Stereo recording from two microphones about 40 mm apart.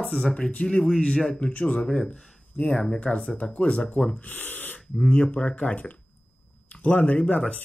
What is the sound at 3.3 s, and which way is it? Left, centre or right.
Speech, left.